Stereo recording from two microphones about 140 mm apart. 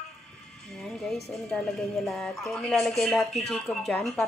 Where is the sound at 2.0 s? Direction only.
Centre (ahead or behind).